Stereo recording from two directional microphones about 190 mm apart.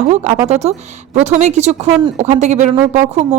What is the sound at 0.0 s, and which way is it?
A woman's voice, 40° right (ahead or behind).